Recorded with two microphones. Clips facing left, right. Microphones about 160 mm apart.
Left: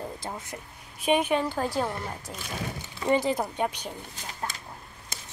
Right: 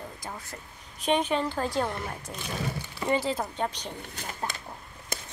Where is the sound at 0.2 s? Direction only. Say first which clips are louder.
Left 3 dB; 25° left (ahead or behind).